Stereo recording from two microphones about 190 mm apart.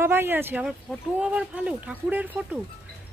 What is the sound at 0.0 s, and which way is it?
Speech, 15° right (ahead or behind).